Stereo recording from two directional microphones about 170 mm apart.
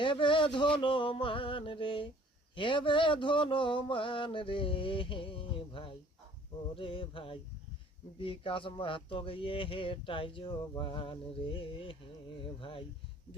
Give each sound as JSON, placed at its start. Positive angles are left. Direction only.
{"t": 0.0, "sound": "a man's voice", "side_deg": 30}